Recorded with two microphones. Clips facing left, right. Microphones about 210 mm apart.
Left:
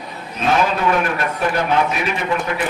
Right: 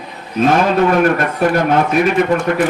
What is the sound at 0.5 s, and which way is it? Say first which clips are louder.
A man's voice: right 3 dB; 45° right (ahead or behind).